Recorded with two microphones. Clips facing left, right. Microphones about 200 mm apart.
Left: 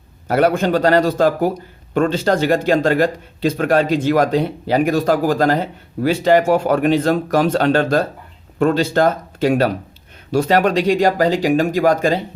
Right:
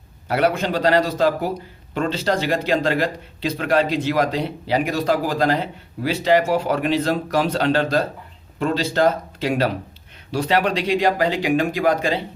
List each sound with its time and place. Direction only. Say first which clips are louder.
0.3 s speech: left 5 dB; 45° left (ahead or behind)